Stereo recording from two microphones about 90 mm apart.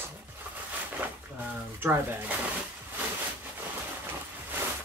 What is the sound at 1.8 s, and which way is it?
Speech, 25° right (ahead or behind).